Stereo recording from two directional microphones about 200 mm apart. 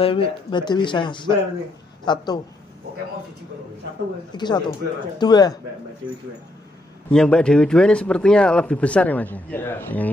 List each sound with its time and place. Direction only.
0.0 s speech: 25° left (ahead or behind)
4.3 s speech: 20° left (ahead or behind)
7.1 s a man's voice: 5° left (ahead or behind)